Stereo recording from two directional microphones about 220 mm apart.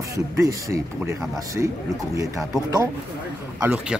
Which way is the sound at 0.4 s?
15° right (ahead or behind).